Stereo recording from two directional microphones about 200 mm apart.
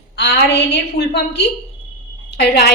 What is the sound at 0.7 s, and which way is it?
A woman's voice, 55° left (ahead or behind).